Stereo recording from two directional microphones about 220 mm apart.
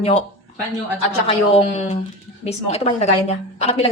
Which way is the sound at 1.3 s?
25° left (ahead or behind).